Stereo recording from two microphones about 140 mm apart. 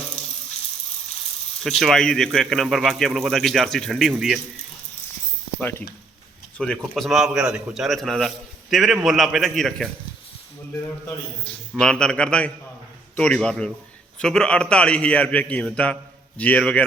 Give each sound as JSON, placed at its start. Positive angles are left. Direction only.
{"t": 1.6, "sound": "a man's voice", "side_deg": 0}
{"t": 6.6, "sound": "a man's voice", "side_deg": 5}
{"t": 11.8, "sound": "a man's voice", "side_deg": 5}